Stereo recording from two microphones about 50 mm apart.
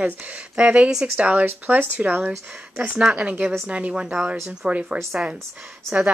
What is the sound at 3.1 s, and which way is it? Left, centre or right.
Speech, right.